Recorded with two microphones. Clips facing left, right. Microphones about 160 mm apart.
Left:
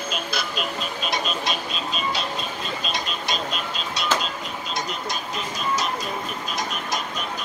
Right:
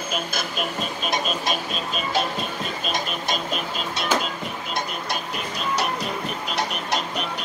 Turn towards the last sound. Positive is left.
turn(degrees=-70)  # may be behind; listen again after turning